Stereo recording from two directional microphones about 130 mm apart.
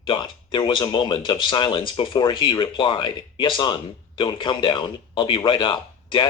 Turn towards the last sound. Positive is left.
turn(degrees=35)  # may be behind; listen again after turning